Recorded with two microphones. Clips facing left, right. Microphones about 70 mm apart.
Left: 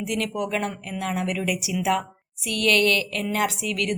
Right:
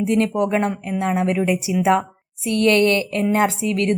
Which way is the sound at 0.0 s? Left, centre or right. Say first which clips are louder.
Right 8 dB; right.